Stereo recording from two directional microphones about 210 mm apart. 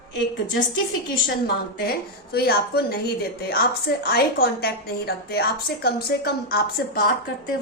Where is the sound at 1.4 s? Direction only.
45° left (ahead or behind).